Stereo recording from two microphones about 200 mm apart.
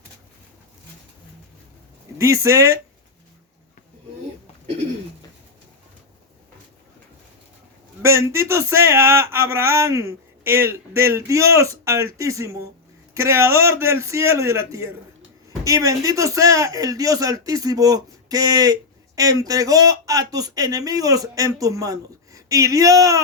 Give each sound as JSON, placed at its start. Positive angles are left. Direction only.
{"t": 2.1, "sound": "a man's voice", "side_deg": -15}
{"t": 8.0, "sound": "a man's voice", "side_deg": -15}